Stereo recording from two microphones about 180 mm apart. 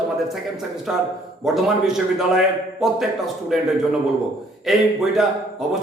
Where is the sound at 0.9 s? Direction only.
Centre (ahead or behind).